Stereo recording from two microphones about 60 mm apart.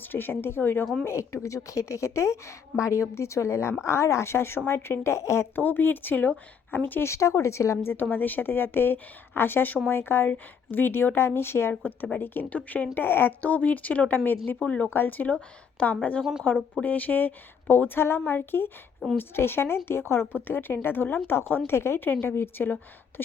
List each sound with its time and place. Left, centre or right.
0.0 s speech: left
1.0 s a woman's voice: left
5.5 s speech: left
7.0 s a woman's voice: left
8.1 s speech: left
11.7 s speech: left
13.4 s speech: left
14.6 s speech: left
14.9 s speech: left
16.5 s speech: left